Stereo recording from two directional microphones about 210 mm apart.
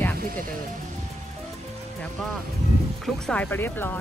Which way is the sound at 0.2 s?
45° right (ahead or behind).